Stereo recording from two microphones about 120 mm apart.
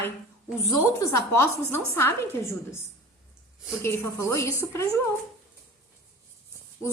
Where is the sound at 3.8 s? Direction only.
25° left (ahead or behind).